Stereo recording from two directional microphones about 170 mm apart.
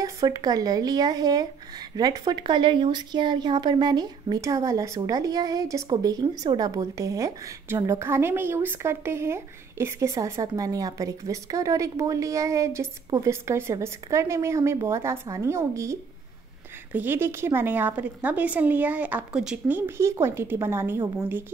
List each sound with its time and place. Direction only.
0.0 s a woman's voice: 20° right (ahead or behind); by 19.8 s 5° right (ahead or behind)
20.0 s a woman's voice: 15° right (ahead or behind)